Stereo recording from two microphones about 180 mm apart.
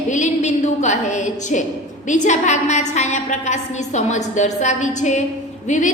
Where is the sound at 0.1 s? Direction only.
40° left (ahead or behind).